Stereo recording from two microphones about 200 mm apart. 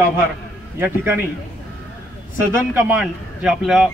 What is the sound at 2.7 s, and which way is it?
A man's voice, 5° right (ahead or behind).